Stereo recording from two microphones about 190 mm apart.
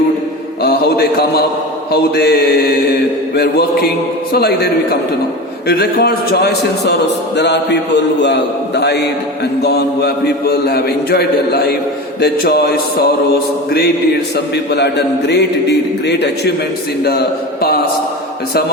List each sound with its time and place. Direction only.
0.6 s a man's voice: 55° left (ahead or behind)